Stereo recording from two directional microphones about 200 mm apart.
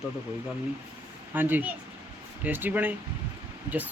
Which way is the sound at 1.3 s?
10° right (ahead or behind).